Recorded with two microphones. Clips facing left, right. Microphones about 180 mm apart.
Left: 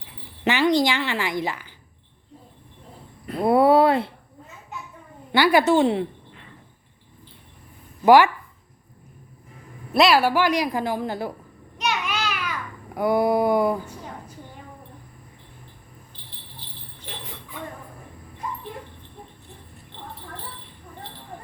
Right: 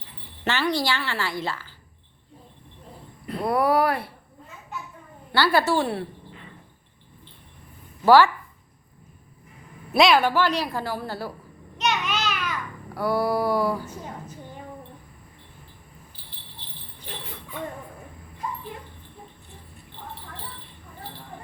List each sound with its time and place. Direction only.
0.4 s a woman's voice: 20° left (ahead or behind)
3.4 s a woman's voice: 25° left (ahead or behind)
5.3 s a woman's voice: 15° left (ahead or behind)
8.0 s a woman's voice: 15° left (ahead or behind)
9.9 s a woman's voice: 5° left (ahead or behind); by 11.3 s 20° left (ahead or behind)
11.8 s a sound: 10° left (ahead or behind)
16.2 s a sound: 5° right (ahead or behind)